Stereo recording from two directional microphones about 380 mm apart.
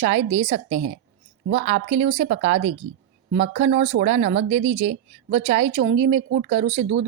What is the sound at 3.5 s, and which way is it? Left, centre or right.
Speech, centre.